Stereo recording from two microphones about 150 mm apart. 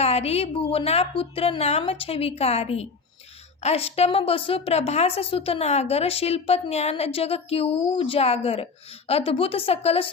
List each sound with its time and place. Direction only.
0.0 s a woman's voice: 45° left (ahead or behind)